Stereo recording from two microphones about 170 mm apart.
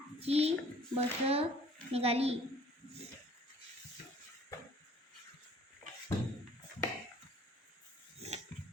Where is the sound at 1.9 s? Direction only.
35° right (ahead or behind).